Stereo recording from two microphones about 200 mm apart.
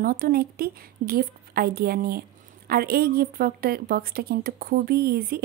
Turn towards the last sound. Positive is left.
turn(degrees=-50)  # may be behind; listen again after turning